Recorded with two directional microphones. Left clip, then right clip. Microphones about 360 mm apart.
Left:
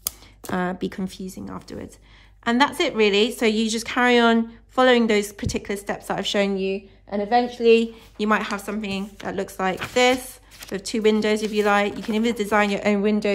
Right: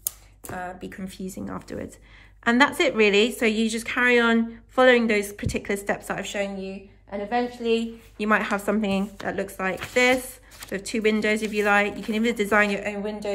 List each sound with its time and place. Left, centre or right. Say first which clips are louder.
0.4 s a woman's voice: left 7 dB; centre
7.1 s a woman's voice: left 5 dB; left
8.2 s a woman's voice: even; centre
12.9 s speech: left 8 dB; centre